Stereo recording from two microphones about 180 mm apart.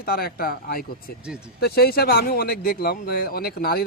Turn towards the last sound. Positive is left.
turn(degrees=60)  # may be behind; listen again after turning